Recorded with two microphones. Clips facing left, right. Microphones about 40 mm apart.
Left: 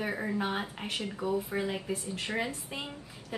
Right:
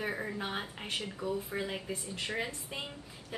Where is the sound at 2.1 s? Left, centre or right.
Centre.